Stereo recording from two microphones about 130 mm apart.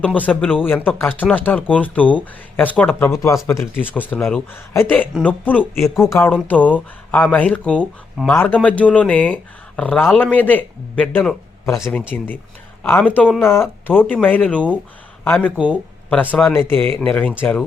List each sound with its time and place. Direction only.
0.0 s speech: 10° left (ahead or behind)
3.2 s speech: 25° left (ahead or behind)
15.5 s speech: 10° right (ahead or behind)
16.3 s speech: 15° left (ahead or behind)